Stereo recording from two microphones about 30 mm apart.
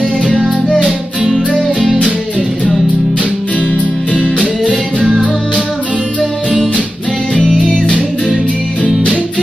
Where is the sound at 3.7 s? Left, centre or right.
Left.